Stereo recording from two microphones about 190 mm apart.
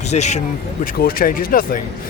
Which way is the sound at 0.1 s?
35° left (ahead or behind).